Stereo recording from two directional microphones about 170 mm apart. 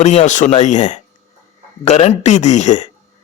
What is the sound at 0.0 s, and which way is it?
Speech, 45° left (ahead or behind).